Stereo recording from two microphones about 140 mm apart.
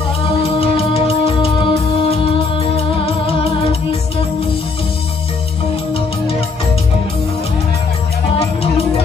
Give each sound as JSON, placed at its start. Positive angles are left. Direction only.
{"t": 0.2, "sound": "music", "side_deg": 40}